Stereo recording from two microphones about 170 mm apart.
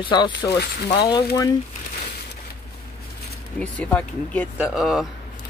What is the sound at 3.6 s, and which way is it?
Speech, 10° left (ahead or behind).